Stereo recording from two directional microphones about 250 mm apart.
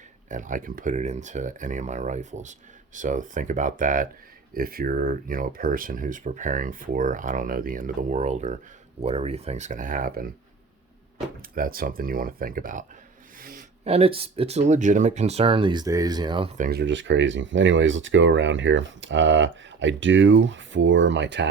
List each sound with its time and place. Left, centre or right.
0.3 s speech: right
11.5 s speech: right; by 16.5 s centre
16.6 s speech: right